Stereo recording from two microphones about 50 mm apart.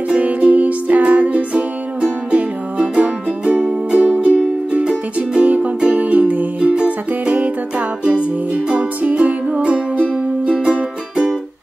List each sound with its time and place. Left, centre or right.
0.1 s music: right